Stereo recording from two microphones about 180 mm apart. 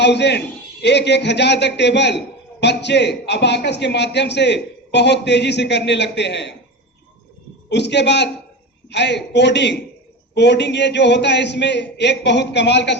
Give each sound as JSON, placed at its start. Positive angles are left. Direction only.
{"t": 0.0, "sound": "a man's voice", "side_deg": 70}
{"t": 7.7, "sound": "a man's voice", "side_deg": 75}